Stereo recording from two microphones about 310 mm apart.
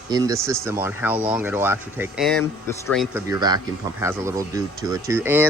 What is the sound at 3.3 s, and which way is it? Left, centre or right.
Speech, centre.